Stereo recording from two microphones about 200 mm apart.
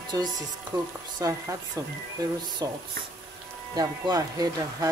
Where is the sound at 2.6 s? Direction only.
20° right (ahead or behind).